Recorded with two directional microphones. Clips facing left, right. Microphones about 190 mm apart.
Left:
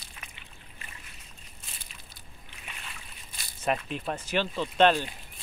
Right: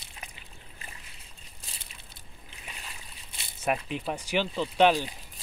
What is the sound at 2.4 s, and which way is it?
Boat, 35° right (ahead or behind).